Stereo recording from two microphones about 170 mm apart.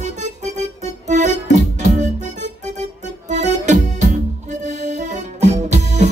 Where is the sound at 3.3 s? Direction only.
45° right (ahead or behind).